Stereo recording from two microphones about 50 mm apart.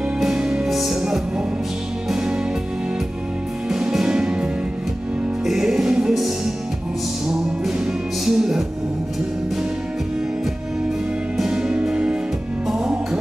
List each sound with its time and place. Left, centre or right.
0.3 s music: centre
0.7 s music: centre
2.1 s music: centre
3.9 s music: centre
6.1 s music: centre
7.8 s music: centre
11.3 s music: centre